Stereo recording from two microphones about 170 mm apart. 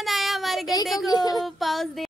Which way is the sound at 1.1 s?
20° left (ahead or behind).